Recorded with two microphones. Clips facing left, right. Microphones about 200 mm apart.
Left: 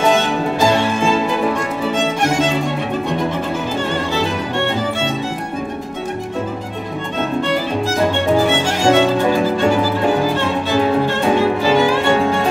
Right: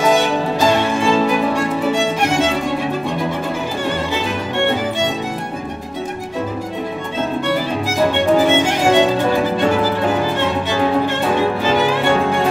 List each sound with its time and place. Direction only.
8.5 s music: 15° right (ahead or behind)